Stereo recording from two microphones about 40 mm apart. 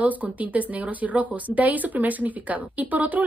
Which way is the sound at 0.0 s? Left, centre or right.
Right.